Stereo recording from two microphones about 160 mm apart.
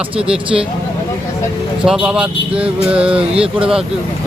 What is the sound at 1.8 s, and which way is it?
Speech, 5° right (ahead or behind).